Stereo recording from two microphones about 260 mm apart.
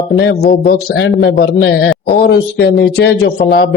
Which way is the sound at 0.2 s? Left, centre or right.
Left.